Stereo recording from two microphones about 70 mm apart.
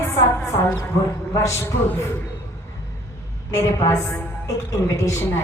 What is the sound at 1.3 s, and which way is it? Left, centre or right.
Speech, left.